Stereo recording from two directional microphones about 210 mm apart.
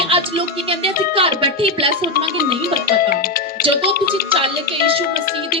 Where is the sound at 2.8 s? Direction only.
45° left (ahead or behind).